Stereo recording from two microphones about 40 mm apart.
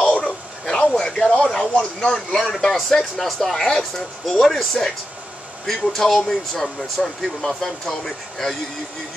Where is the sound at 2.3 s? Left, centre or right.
Centre.